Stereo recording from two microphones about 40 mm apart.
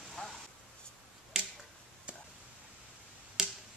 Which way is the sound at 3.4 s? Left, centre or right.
Centre.